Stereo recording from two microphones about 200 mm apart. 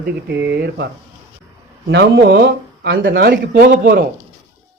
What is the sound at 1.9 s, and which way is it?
Speech, 60° right (ahead or behind).